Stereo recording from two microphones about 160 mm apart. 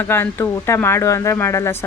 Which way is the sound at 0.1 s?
15° left (ahead or behind).